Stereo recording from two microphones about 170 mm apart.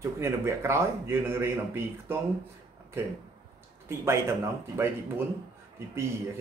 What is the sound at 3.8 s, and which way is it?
Speech, 15° right (ahead or behind).